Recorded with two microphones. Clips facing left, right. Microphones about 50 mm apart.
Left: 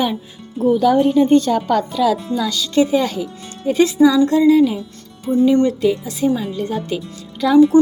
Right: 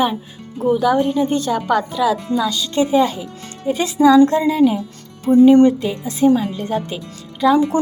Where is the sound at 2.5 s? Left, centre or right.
Right.